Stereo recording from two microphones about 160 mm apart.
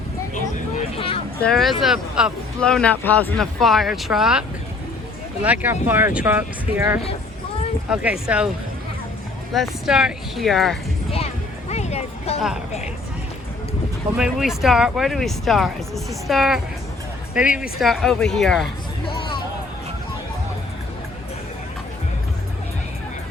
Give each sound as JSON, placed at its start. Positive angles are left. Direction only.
{"t": 0.9, "sound": "vehicle", "side_deg": 35}
{"t": 1.4, "sound": "speech", "side_deg": 0}
{"t": 9.5, "sound": "speech", "side_deg": 0}
{"t": 11.7, "sound": "music", "side_deg": 45}
{"t": 14.2, "sound": "speech", "side_deg": -5}
{"t": 17.6, "sound": "speech", "side_deg": 0}
{"t": 19.0, "sound": "hubbub", "side_deg": 35}